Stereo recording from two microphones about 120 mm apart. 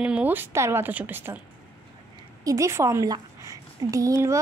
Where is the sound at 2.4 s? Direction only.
30° right (ahead or behind).